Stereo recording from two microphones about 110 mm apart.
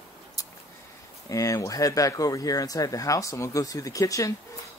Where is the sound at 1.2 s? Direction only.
30° left (ahead or behind).